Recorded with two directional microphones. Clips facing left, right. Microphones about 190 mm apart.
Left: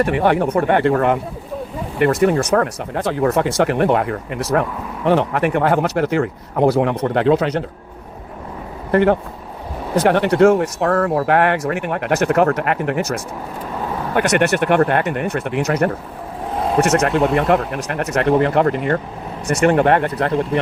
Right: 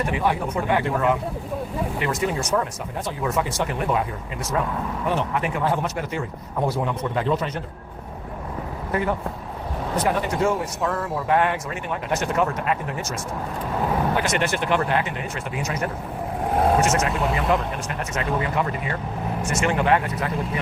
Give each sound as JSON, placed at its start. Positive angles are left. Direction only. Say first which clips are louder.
{"t": 0.0, "sound": "speech", "louder": "left 8 dB", "side_deg": 65}
{"t": 8.9, "sound": "speech", "louder": "left 10 dB", "side_deg": 75}